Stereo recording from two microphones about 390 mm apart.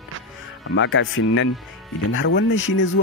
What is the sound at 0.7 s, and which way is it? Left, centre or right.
Speech, left.